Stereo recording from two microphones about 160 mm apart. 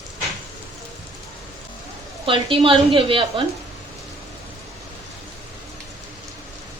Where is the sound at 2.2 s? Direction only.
35° right (ahead or behind).